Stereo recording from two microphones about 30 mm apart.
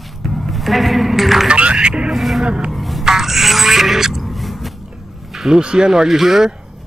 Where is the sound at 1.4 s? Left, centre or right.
Right.